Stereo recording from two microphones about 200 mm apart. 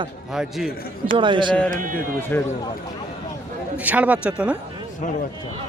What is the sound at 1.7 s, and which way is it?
Speech, 45° right (ahead or behind).